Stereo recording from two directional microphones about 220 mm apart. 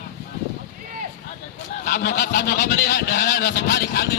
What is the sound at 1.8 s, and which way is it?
Speech, 40° left (ahead or behind).